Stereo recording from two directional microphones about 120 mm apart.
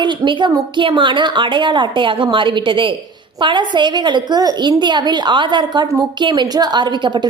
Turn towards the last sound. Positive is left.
turn(degrees=-40)  # may be behind; listen again after turning